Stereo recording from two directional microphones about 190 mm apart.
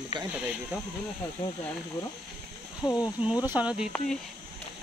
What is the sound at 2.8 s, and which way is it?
Speech, 20° left (ahead or behind).